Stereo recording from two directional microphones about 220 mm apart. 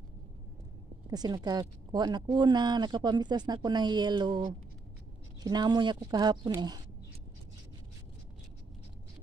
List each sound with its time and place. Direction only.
1.1 s speech: 20° right (ahead or behind)